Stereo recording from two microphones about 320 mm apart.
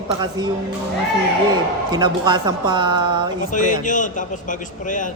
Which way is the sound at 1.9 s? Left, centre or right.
Centre.